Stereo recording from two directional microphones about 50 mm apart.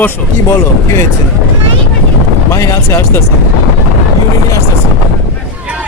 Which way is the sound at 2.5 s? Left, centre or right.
Left.